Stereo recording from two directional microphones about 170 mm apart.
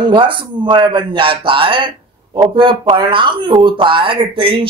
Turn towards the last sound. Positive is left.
turn(degrees=-30)  # may be behind; listen again after turning